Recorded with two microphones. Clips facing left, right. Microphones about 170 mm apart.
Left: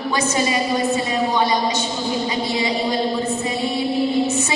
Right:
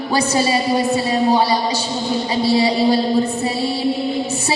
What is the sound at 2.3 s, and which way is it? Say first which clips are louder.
Music: right 6 dB; 35° right (ahead or behind).